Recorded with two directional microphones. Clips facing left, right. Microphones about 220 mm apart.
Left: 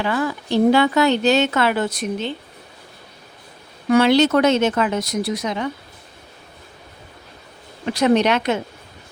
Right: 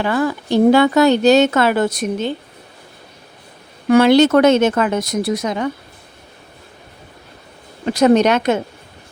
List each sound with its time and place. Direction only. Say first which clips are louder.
0.0 s speech: right 4 dB; 45° right (ahead or behind)
3.9 s speech: right 4 dB; 50° right (ahead or behind)
7.9 s speech: right 4 dB; 45° right (ahead or behind)